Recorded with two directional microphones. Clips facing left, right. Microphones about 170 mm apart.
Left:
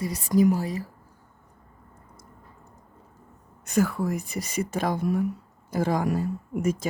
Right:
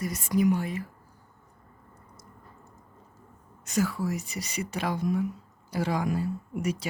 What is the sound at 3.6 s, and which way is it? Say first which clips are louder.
Speech: left 4 dB; 55° left (ahead or behind).